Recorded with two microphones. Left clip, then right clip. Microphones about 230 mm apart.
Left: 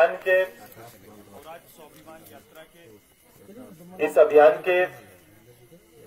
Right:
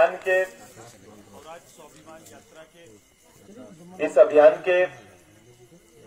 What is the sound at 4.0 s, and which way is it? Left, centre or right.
Speech, left.